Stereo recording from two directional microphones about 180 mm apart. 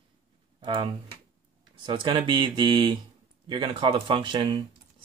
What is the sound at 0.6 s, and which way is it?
Speech, 25° right (ahead or behind).